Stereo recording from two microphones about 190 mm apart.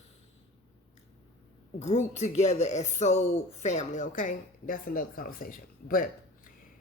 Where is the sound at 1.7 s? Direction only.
35° left (ahead or behind).